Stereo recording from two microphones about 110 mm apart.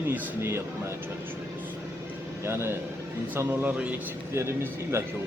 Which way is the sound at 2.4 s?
20° right (ahead or behind).